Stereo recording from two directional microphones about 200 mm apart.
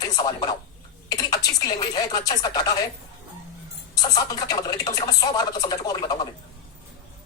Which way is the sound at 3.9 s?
20° left (ahead or behind).